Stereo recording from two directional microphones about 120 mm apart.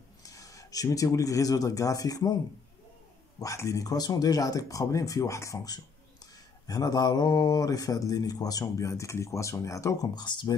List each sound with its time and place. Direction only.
0.2 s speech: 30° left (ahead or behind)
3.3 s speech: 25° left (ahead or behind)